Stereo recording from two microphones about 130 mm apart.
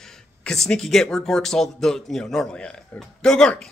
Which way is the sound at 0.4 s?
5° left (ahead or behind).